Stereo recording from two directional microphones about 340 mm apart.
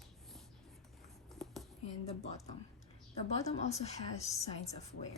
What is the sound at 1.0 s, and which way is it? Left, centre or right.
Writing, centre.